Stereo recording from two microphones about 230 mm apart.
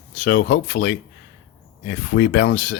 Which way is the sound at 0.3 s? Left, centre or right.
Left.